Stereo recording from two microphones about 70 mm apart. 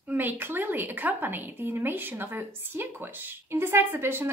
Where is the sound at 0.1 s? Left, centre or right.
Right.